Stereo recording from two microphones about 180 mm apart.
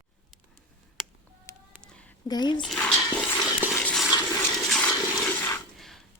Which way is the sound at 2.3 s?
25° left (ahead or behind).